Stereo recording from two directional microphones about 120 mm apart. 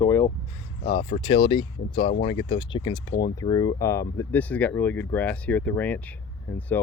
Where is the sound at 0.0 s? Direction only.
20° left (ahead or behind).